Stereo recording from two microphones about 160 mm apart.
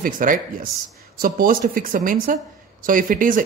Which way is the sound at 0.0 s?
60° right (ahead or behind).